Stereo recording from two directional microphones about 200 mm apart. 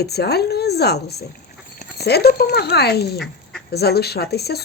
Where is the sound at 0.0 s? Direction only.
55° left (ahead or behind).